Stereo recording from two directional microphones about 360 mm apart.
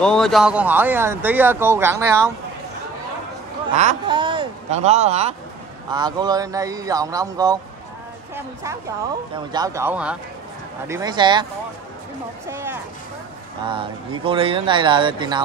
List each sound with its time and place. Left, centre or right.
0.0 s speech: centre
3.7 s speech: centre
9.3 s speech: centre
12.4 s speech: centre